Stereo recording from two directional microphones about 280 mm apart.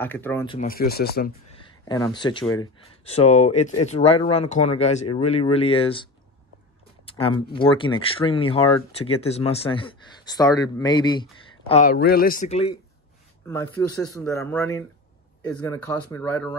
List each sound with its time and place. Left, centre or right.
0.0 s speech: centre
0.6 s speech: left
1.6 s speech: centre
7.1 s speech: centre
14.1 s speech: centre